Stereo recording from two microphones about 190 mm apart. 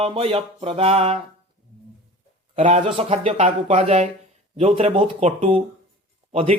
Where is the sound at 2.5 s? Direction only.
35° right (ahead or behind).